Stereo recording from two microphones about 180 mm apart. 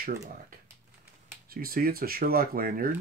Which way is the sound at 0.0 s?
55° right (ahead or behind).